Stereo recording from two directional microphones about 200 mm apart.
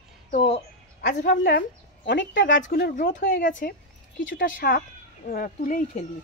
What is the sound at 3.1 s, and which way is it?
A woman's voice, 40° left (ahead or behind).